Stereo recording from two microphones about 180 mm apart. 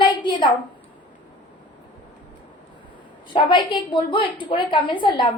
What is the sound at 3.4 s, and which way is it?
A woman's voice, 25° left (ahead or behind).